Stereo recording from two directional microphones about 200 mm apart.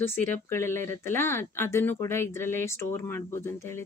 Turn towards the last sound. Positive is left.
turn(degrees=15)  # may be behind; listen again after turning